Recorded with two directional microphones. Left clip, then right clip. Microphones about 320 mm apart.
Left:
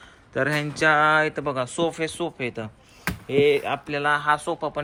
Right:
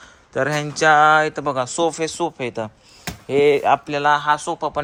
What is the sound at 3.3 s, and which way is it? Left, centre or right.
Speech, right.